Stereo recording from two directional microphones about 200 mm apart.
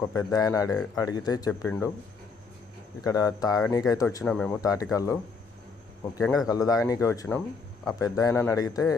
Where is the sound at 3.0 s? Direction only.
15° left (ahead or behind).